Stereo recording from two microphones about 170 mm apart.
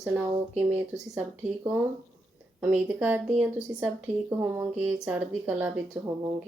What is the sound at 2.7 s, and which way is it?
A woman's voice, 10° right (ahead or behind).